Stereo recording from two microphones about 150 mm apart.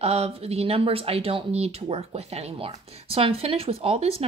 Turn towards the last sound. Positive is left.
turn(degrees=-40)  # may be behind; listen again after turning